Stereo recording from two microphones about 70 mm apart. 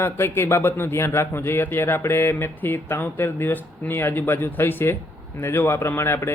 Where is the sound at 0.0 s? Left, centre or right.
Left.